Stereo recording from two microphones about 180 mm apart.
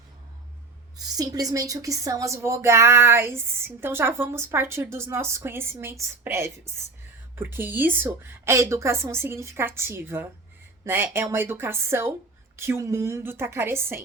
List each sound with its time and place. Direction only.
0.9 s speech: 20° right (ahead or behind)